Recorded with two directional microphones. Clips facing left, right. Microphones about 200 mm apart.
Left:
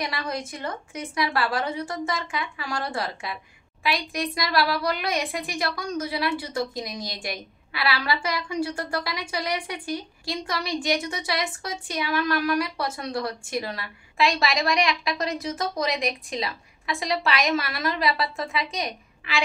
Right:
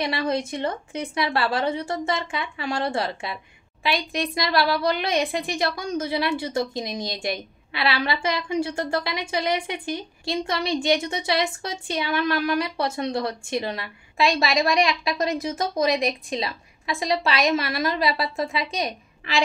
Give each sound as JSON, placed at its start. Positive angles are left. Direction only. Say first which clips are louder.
{"t": 0.0, "sound": "a woman's voice", "louder": "right 6 dB", "side_deg": -25}
{"t": 19.2, "sound": "a woman's voice", "louder": "right 3 dB", "side_deg": -40}